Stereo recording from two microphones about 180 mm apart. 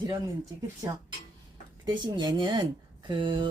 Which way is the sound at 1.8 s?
25° right (ahead or behind).